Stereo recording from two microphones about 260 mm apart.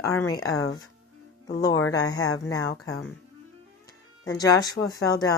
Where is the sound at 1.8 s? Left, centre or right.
Centre.